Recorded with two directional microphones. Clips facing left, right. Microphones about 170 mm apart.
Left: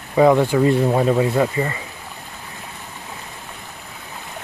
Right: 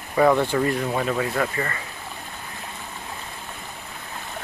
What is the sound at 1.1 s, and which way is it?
Speech, 20° left (ahead or behind).